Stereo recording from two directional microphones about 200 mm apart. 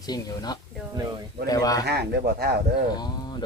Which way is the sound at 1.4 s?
20° left (ahead or behind).